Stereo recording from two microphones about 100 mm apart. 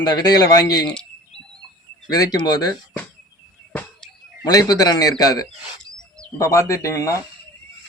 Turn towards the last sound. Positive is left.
turn(degrees=30)  # may be behind; listen again after turning